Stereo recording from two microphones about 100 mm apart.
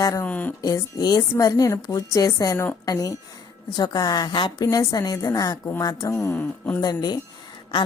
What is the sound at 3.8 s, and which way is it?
Speech, 40° left (ahead or behind).